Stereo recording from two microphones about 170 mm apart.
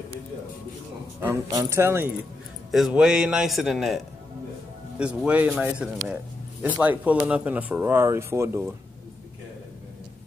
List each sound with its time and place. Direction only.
1.2 s speech: 20° right (ahead or behind)
2.7 s a man's voice: centre (ahead or behind)